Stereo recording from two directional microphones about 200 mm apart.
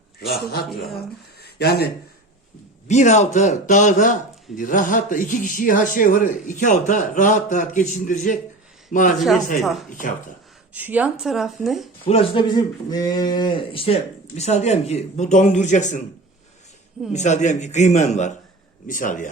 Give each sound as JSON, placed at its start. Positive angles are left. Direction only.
{"t": 0.2, "sound": "a man's voice", "side_deg": 50}
{"t": 2.8, "sound": "a man's voice", "side_deg": 35}
{"t": 9.1, "sound": "speech", "side_deg": 0}
{"t": 10.8, "sound": "speech", "side_deg": -10}
{"t": 12.0, "sound": "a man's voice", "side_deg": 30}
{"t": 17.1, "sound": "a man's voice", "side_deg": 35}